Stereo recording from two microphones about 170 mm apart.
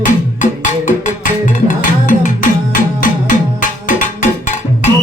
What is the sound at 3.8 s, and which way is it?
Cowbell, 50° left (ahead or behind).